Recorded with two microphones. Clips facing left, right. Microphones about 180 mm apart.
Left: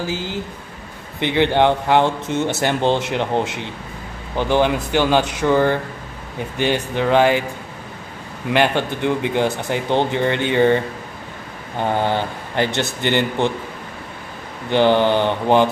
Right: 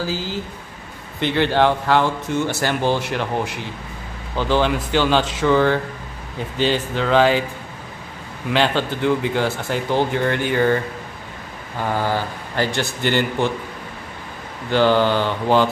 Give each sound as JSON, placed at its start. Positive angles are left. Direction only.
{"t": 0.0, "sound": "speech", "side_deg": 20}
{"t": 8.5, "sound": "speech", "side_deg": 15}
{"t": 11.8, "sound": "speech", "side_deg": 25}
{"t": 14.7, "sound": "speech", "side_deg": 20}